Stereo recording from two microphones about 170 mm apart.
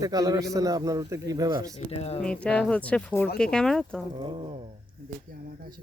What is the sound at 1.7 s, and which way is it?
Speech, 40° left (ahead or behind).